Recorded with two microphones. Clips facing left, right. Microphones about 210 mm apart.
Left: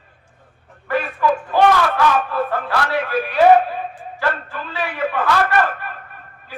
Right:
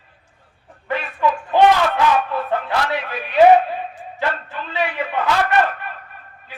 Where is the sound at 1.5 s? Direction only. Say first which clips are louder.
Right 2 dB; 20° right (ahead or behind).